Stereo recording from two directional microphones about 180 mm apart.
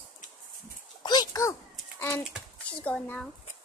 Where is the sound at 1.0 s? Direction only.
20° left (ahead or behind).